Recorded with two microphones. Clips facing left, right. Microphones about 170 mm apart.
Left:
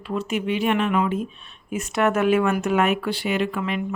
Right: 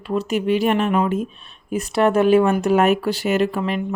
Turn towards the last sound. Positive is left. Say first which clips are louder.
# right 4 dB
turn(degrees=-35)  # may be behind; listen again after turning